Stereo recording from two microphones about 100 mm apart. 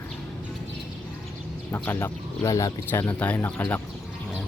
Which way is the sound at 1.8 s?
20° left (ahead or behind).